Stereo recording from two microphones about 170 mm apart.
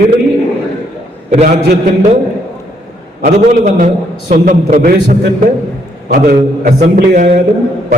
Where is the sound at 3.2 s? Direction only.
45° right (ahead or behind).